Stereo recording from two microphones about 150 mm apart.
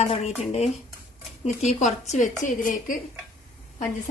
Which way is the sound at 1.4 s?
50° left (ahead or behind).